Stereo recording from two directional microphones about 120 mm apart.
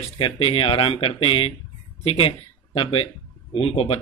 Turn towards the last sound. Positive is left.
turn(degrees=55)  # may be behind; listen again after turning